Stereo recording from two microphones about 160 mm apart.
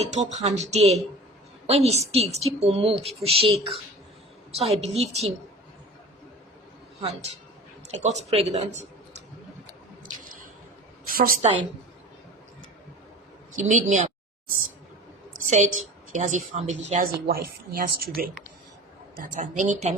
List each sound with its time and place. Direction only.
0.1 s a woman's voice: 45° right (ahead or behind)
7.0 s speech: 40° right (ahead or behind)
10.2 s squish: 60° right (ahead or behind)
11.1 s a woman's voice: 65° right (ahead or behind)
13.6 s a woman's voice: 50° right (ahead or behind)
15.4 s a woman's voice: 50° right (ahead or behind)
17.2 s a woman's voice: 65° right (ahead or behind)
19.2 s a woman's voice: 55° right (ahead or behind)